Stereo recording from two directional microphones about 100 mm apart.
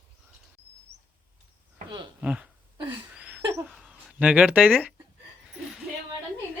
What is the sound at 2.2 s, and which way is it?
Speech, 10° right (ahead or behind).